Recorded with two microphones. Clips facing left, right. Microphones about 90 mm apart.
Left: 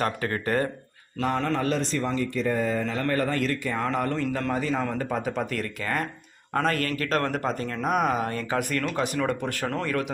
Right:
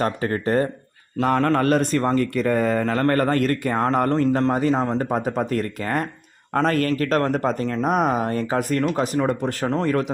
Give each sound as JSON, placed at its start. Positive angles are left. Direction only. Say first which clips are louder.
{"t": 0.0, "sound": "a man's voice", "louder": "right 4 dB", "side_deg": -30}
{"t": 1.2, "sound": "a man's voice", "louder": "right 6 dB", "side_deg": -45}
{"t": 5.0, "sound": "a man's voice", "louder": "right 5 dB", "side_deg": -40}